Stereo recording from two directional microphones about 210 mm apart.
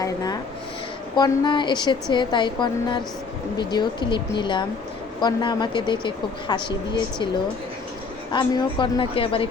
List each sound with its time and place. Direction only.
0.0 s speech: 15° left (ahead or behind)
8.3 s speech: 20° left (ahead or behind)